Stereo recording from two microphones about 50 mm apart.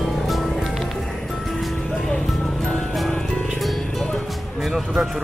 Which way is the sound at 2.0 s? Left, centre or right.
Centre.